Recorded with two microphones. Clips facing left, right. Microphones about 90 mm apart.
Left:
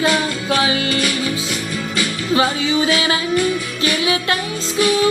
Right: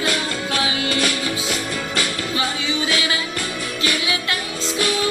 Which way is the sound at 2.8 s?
40° left (ahead or behind).